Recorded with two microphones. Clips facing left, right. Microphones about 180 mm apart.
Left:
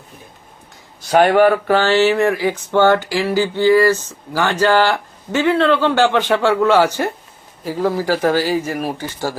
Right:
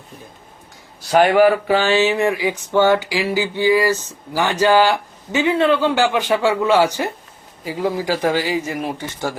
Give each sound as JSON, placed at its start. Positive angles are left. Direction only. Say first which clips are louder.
{"t": 1.0, "sound": "a man's voice", "louder": "left 1 dB", "side_deg": 0}